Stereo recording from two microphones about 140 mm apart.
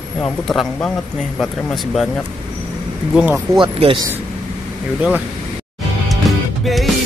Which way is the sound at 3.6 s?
40° right (ahead or behind).